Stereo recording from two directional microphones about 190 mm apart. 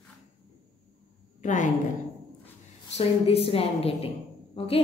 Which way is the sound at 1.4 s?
40° left (ahead or behind).